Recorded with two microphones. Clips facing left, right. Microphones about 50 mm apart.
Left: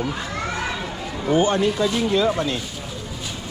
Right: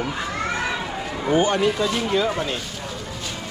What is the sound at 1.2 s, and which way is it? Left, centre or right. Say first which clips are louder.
Speech: left 1 dB; right.